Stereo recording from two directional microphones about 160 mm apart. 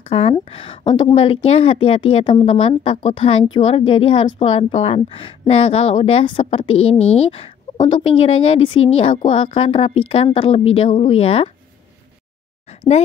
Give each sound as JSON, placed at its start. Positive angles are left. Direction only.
{"t": 0.1, "sound": "speech", "side_deg": 35}